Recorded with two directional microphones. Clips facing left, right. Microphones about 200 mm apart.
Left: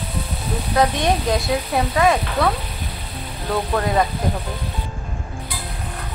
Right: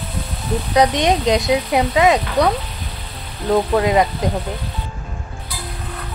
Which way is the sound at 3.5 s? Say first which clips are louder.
Right 5 dB; 15° right (ahead or behind).